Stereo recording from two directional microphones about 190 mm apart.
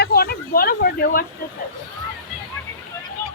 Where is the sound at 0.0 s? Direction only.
55° left (ahead or behind).